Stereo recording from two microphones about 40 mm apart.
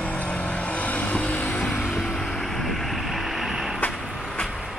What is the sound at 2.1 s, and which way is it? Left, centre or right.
Vehicle, centre.